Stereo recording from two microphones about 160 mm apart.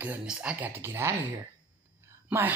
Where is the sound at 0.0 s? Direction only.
10° right (ahead or behind).